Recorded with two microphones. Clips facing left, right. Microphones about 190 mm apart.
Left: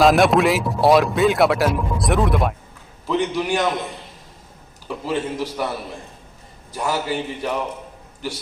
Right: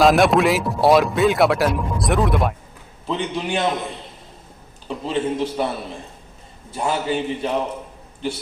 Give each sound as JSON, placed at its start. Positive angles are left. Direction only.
{"t": 0.0, "sound": "speech", "side_deg": 0}
{"t": 3.1, "sound": "a man's voice", "side_deg": -25}
{"t": 4.9, "sound": "a man's voice", "side_deg": -25}
{"t": 6.7, "sound": "a man's voice", "side_deg": -25}